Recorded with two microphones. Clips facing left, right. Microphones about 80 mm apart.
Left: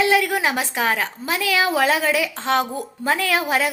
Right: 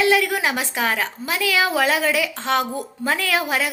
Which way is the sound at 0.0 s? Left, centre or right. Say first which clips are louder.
Even; left.